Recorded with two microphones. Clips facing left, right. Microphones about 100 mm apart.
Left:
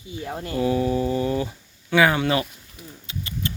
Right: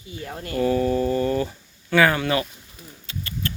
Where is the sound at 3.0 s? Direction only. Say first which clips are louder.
Even; 15° left (ahead or behind).